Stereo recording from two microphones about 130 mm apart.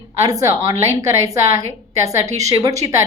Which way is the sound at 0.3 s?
25° right (ahead or behind).